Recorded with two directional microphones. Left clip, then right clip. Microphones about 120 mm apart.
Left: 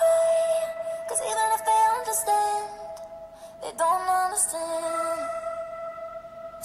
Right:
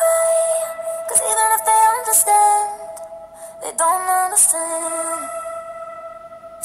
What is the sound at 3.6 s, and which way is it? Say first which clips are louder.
Music: right 6 dB; 10° right (ahead or behind).